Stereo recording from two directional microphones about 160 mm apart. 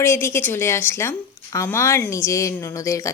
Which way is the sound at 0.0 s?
15° left (ahead or behind).